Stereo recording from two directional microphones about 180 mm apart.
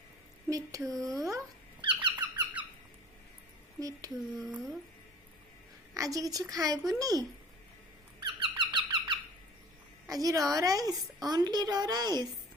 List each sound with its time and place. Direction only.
0.5 s a woman's voice: 20° right (ahead or behind)
1.8 s squeak: 25° right (ahead or behind)
3.8 s speech: 20° right (ahead or behind)
4.4 s speech: centre (ahead or behind)
5.9 s a woman's voice: 20° right (ahead or behind)
8.2 s squeak: 25° right (ahead or behind)
10.1 s a woman's voice: 20° right (ahead or behind)